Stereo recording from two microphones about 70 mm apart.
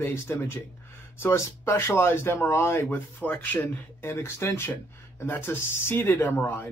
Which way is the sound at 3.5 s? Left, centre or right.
Left.